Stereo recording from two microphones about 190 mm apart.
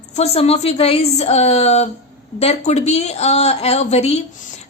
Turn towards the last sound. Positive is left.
turn(degrees=35)  # may be behind; listen again after turning